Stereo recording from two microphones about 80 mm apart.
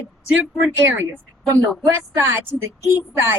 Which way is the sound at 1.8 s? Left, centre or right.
Right.